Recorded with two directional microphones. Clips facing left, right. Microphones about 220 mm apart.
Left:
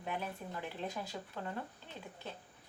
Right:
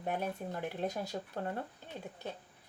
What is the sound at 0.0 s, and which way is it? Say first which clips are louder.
Speech: right 5 dB; 45° right (ahead or behind).